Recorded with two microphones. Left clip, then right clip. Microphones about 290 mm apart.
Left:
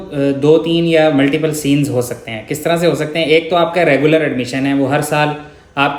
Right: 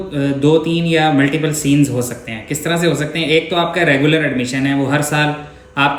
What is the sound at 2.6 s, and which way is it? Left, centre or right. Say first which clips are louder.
A man's voice: left 3 dB; centre.